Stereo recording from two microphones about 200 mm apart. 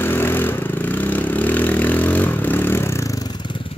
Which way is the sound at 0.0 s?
10° left (ahead or behind).